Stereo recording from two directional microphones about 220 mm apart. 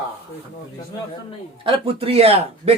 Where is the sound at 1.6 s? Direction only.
25° right (ahead or behind).